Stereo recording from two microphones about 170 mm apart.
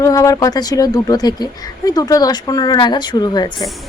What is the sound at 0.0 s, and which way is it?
Speech, 20° left (ahead or behind).